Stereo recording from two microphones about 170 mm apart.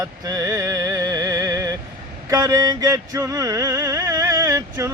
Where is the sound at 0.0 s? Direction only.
20° right (ahead or behind).